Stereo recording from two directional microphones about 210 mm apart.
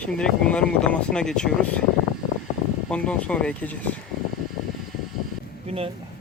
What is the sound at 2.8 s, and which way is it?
Speech, 5° left (ahead or behind).